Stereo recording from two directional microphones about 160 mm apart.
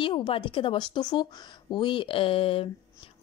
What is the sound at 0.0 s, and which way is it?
Speech, 30° left (ahead or behind).